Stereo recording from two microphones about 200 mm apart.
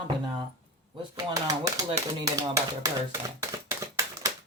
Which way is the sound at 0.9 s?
20° right (ahead or behind).